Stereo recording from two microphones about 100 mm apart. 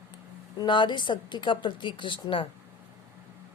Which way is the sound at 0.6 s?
50° left (ahead or behind).